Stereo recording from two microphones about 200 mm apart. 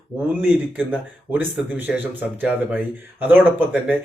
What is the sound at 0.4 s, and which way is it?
Speech, 10° right (ahead or behind).